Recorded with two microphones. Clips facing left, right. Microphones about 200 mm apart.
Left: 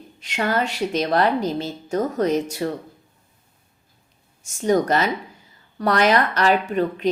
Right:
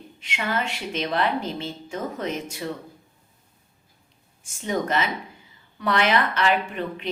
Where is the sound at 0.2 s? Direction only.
40° left (ahead or behind).